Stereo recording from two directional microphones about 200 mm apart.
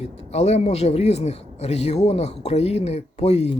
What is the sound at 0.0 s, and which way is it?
Speech, 30° left (ahead or behind).